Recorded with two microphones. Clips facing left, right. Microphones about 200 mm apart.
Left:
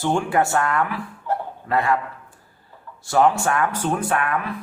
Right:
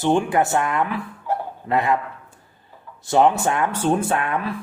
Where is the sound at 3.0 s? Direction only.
20° right (ahead or behind).